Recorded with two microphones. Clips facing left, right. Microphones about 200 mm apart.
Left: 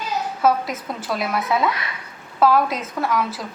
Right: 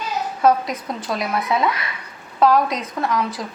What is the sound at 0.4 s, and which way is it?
Speech, 5° left (ahead or behind).